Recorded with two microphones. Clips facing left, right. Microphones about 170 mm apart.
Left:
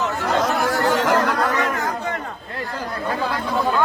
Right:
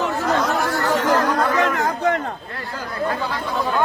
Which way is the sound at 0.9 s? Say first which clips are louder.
Even; 90° left.